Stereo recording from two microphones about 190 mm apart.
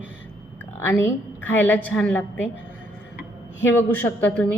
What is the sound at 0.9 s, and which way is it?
A woman's voice, 10° left (ahead or behind).